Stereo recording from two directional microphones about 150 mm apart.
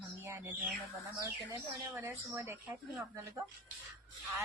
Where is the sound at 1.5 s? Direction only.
20° right (ahead or behind).